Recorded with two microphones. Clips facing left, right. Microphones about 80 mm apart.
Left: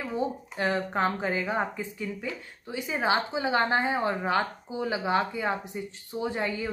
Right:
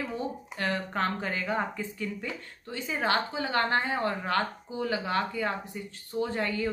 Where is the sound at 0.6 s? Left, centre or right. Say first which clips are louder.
Left 3 dB; centre.